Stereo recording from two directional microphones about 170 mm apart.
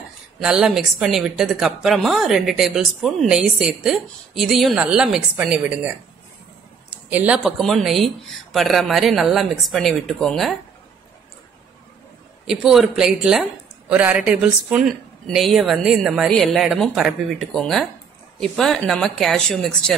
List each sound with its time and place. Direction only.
0.4 s a woman's voice: 5° right (ahead or behind)
6.9 s a woman's voice: 10° right (ahead or behind)
12.4 s a woman's voice: centre (ahead or behind)